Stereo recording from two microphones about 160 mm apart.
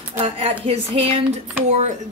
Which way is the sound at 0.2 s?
40° right (ahead or behind).